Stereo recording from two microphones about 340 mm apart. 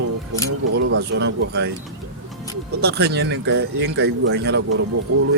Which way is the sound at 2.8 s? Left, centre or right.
Right.